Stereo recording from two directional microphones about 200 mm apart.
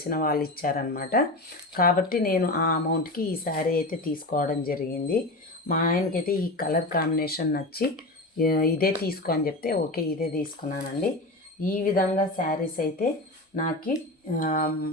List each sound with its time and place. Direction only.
0.0 s speech: 45° left (ahead or behind)